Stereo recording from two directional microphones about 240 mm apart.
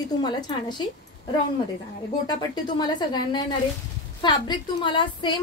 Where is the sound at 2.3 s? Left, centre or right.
Centre.